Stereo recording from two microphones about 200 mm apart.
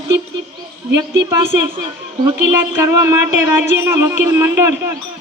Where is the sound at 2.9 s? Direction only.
15° right (ahead or behind).